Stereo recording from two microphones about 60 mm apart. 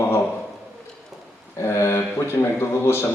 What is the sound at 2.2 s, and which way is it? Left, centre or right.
Speech, left.